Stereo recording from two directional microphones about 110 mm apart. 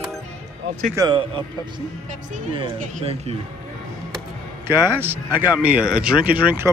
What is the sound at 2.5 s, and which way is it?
Speech, 60° right (ahead or behind).